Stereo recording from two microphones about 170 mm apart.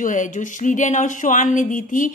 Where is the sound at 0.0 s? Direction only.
50° left (ahead or behind).